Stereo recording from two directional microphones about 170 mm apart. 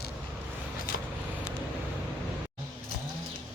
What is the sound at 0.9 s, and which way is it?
Vehicle, 65° left (ahead or behind).